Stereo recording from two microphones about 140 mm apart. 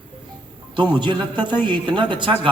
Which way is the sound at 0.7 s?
35° right (ahead or behind).